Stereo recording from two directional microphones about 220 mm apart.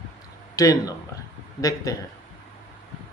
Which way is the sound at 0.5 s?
15° left (ahead or behind).